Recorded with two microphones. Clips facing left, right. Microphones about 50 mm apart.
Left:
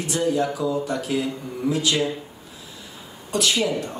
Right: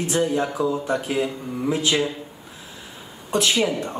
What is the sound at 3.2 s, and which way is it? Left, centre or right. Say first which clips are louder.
Speech: right 1 dB; right.